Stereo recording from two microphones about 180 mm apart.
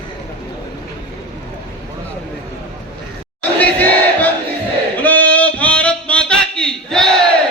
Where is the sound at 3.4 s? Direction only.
10° left (ahead or behind).